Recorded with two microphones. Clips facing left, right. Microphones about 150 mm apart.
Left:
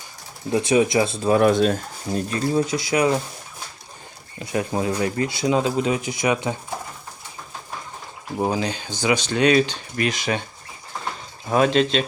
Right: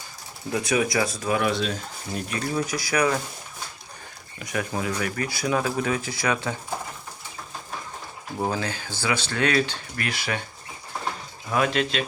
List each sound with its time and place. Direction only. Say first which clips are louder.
0.5 s speech: left 6 dB; 25° left (ahead or behind)
1.4 s speech: left 10 dB; 45° left (ahead or behind)
2.1 s speech: left 6 dB; 30° left (ahead or behind)
4.4 s speech: left 5 dB; 25° left (ahead or behind)
8.4 s speech: left 4 dB; 20° left (ahead or behind)
11.4 s speech: left 6 dB; 30° left (ahead or behind)